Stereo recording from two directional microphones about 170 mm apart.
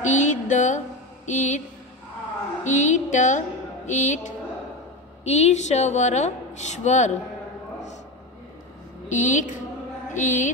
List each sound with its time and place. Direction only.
0.0 s a sound: 45° left (ahead or behind)
1.2 s a woman's voice: 45° left (ahead or behind)
2.6 s a woman's voice: 45° left (ahead or behind)
9.1 s a woman's voice: 45° left (ahead or behind)